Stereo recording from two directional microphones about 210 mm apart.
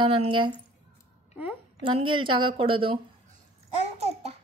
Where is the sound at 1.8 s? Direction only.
25° right (ahead or behind).